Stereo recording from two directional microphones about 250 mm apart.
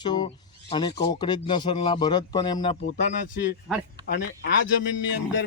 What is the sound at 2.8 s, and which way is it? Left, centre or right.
Speech, left.